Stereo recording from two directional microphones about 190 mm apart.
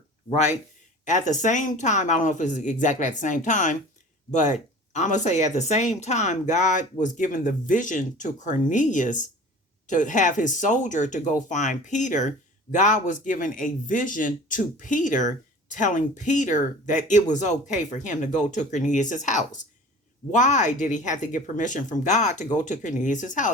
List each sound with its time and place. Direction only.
0.3 s speech: 40° left (ahead or behind)